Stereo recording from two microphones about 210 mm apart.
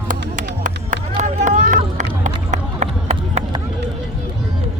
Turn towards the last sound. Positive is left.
turn(degrees=-35)  # may be behind; listen again after turning